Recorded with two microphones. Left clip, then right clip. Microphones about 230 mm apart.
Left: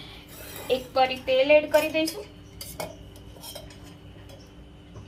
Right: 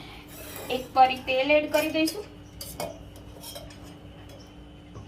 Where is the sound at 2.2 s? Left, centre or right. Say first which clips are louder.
Even; centre.